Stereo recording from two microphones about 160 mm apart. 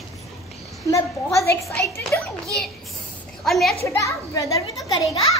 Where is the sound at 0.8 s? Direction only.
20° left (ahead or behind).